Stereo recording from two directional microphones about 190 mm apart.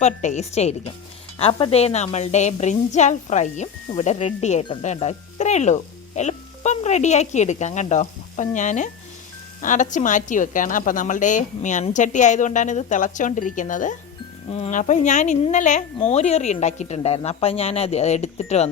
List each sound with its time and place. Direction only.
0.0 s a woman's voice: 40° left (ahead or behind)